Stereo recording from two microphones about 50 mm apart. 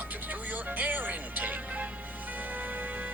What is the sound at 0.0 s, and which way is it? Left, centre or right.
Music, right.